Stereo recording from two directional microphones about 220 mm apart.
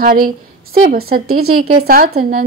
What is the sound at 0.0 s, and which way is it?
A woman's voice, 40° right (ahead or behind).